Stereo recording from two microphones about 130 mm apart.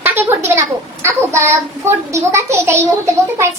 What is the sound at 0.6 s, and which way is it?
A child's voice, 20° right (ahead or behind).